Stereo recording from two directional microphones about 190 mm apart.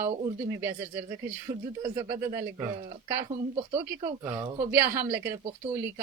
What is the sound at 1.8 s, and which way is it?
Speech, 20° right (ahead or behind).